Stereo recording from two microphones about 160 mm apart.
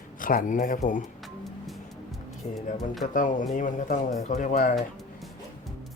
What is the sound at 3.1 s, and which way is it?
Speech, 55° left (ahead or behind).